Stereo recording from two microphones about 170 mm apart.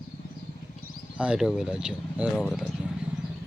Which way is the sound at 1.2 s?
5° right (ahead or behind).